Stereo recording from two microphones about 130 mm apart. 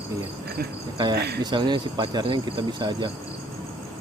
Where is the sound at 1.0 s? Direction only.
35° right (ahead or behind).